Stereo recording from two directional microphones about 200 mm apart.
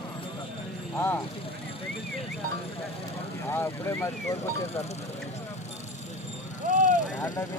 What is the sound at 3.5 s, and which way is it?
Vehicle, 15° left (ahead or behind).